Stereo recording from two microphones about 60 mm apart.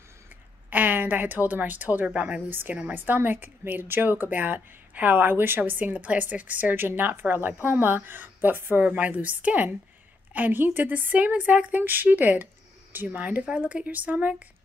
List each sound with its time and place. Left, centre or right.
0.7 s speech: right
2.9 s speech: right
13.5 s speech: centre